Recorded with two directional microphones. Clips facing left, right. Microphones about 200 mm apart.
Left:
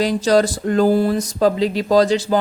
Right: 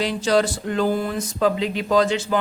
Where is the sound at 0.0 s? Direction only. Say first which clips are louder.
Left 4 dB; 40° left (ahead or behind).